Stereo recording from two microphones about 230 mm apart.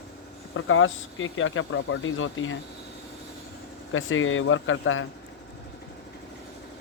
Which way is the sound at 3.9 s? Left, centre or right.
Left.